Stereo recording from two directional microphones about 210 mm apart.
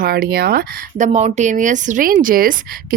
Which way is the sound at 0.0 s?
45° right (ahead or behind).